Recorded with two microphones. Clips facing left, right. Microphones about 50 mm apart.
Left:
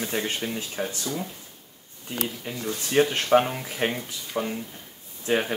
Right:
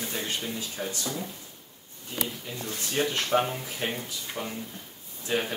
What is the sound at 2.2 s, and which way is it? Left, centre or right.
Speech, left.